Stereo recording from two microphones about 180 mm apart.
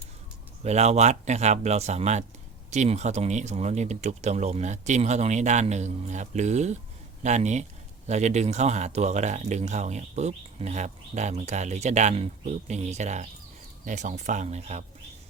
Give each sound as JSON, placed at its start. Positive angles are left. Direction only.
{"t": 0.6, "sound": "speech", "side_deg": -40}